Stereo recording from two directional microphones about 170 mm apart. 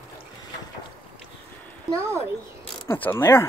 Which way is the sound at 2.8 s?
10° left (ahead or behind).